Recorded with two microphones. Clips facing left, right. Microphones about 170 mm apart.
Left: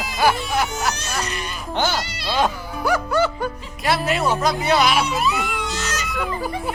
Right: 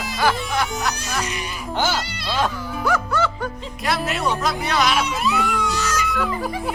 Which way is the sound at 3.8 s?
Centre (ahead or behind).